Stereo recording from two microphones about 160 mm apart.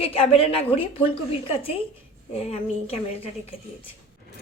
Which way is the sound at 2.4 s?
40° left (ahead or behind).